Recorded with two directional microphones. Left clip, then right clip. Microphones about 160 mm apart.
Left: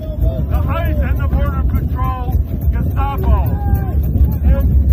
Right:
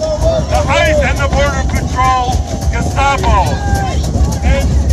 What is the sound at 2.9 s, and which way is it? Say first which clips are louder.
Music: right 11 dB; 30° right (ahead or behind).